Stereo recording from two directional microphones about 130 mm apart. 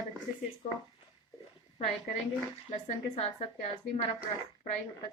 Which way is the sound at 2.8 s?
55° left (ahead or behind).